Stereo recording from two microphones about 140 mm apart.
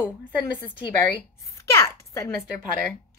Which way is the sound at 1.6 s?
20° left (ahead or behind).